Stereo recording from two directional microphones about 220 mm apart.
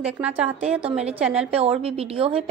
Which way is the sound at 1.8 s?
25° right (ahead or behind).